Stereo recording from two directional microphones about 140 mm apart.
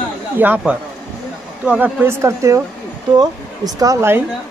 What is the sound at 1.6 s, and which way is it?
Speech, 10° right (ahead or behind).